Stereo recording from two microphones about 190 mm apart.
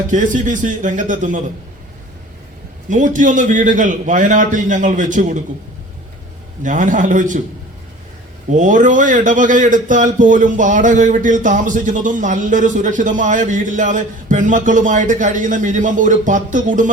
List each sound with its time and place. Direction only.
0.1 s a man's voice: 40° right (ahead or behind)
2.9 s a man's voice: 40° right (ahead or behind)
6.6 s a man's voice: 40° right (ahead or behind)
8.4 s a man's voice: 40° right (ahead or behind)